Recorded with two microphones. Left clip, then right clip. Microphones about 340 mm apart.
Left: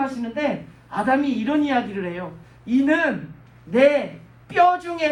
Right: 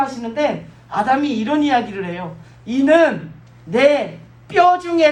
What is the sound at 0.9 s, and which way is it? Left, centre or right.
Speech, right.